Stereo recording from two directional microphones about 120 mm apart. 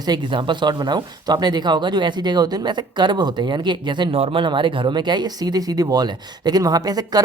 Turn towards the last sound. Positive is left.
turn(degrees=-35)  # may be behind; listen again after turning